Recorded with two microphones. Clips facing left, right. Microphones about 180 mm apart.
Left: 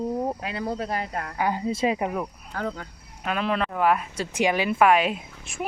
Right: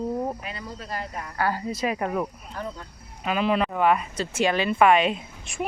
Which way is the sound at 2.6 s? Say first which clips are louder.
Left 4 dB; 80° left.